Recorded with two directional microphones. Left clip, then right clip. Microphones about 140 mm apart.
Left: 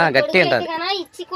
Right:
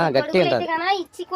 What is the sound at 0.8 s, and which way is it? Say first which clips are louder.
Speech: right 1 dB; 50° right (ahead or behind).